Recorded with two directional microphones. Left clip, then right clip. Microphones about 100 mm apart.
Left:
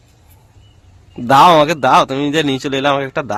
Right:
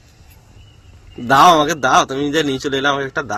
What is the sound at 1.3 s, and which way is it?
A man's voice, 65° left (ahead or behind).